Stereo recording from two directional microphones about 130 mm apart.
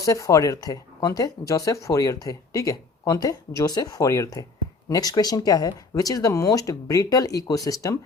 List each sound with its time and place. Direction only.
0.0 s speech: 25° left (ahead or behind)